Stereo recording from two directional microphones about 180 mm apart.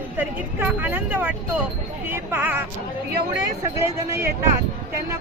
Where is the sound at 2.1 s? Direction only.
10° right (ahead or behind).